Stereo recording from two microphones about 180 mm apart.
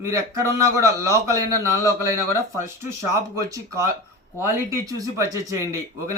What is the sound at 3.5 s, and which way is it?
A man's voice, 15° right (ahead or behind).